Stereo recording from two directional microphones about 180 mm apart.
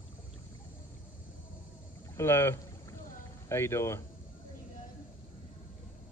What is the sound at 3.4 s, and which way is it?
Speech, 15° left (ahead or behind).